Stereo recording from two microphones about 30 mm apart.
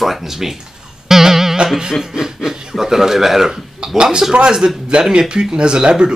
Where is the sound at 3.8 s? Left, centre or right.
Right.